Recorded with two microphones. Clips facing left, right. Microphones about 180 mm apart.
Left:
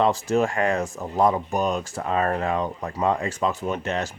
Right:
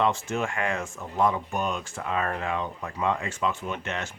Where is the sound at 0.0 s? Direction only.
35° left (ahead or behind).